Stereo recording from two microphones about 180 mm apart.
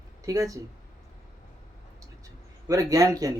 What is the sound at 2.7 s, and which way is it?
Speech, 20° right (ahead or behind).